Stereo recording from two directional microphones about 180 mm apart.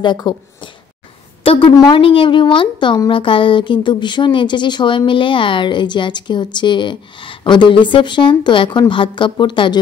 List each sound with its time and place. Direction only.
0.0 s a woman's voice: 25° left (ahead or behind)